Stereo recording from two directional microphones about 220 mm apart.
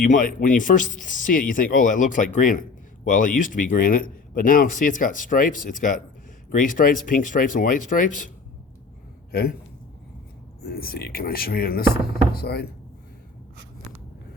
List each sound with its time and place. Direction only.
0.0 s speech: 40° left (ahead or behind)
9.3 s speech: 45° left (ahead or behind)
10.6 s speech: 45° left (ahead or behind)